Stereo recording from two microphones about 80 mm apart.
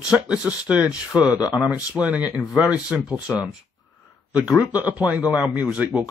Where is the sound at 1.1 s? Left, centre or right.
Left.